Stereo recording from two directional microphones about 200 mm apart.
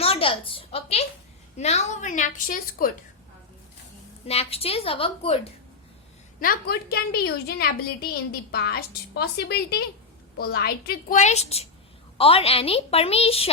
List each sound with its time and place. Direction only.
0.0 s a sound: 30° left (ahead or behind)
1.5 s a woman's voice: 35° left (ahead or behind)
4.3 s a woman's voice: 30° left (ahead or behind)
6.4 s a woman's voice: 45° left (ahead or behind)
11.2 s a woman's voice: 35° left (ahead or behind)